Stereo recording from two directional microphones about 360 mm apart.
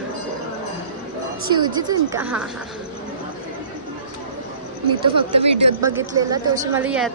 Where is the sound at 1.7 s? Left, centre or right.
Centre.